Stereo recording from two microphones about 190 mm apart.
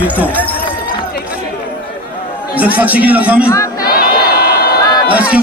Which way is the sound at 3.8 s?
55° left (ahead or behind).